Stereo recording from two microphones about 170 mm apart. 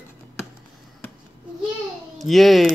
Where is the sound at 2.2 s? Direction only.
Centre (ahead or behind).